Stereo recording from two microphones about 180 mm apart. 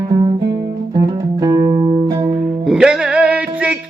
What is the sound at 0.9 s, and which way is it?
Music, 20° right (ahead or behind).